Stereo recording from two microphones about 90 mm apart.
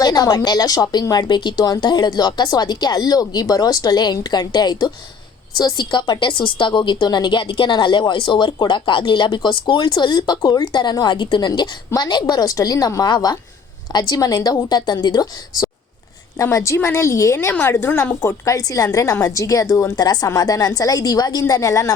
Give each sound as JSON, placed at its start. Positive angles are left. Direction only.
{"t": 0.0, "sound": "a woman's voice", "side_deg": 45}
{"t": 16.4, "sound": "a woman's voice", "side_deg": 35}
{"t": 18.2, "sound": "a woman's voice", "side_deg": 35}